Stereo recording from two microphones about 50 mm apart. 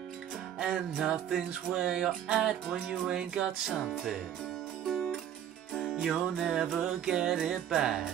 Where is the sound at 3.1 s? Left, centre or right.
Centre.